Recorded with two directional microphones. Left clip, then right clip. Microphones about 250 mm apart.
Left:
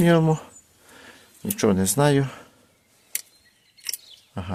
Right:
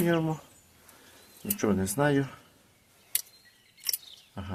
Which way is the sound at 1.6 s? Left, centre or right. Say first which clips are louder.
Left 7 dB; left.